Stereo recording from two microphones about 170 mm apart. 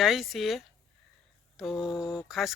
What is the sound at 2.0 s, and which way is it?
Mantra, 25° left (ahead or behind).